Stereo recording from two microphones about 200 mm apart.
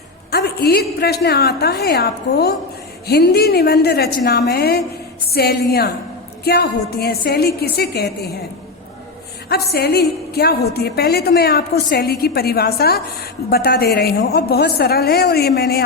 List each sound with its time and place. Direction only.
0.3 s a woman's voice: 50° left (ahead or behind)
9.5 s a woman's voice: 50° left (ahead or behind)